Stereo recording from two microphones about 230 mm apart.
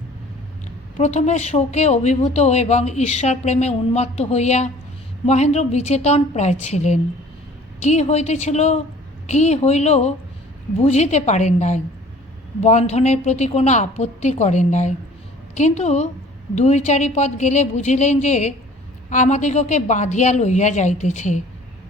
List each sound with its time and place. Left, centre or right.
0.9 s a woman's voice: left